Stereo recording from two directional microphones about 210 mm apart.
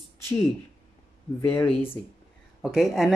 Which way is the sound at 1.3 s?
10° left (ahead or behind).